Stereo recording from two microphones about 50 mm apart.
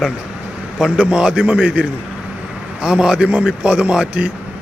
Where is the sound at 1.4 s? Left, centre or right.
Right.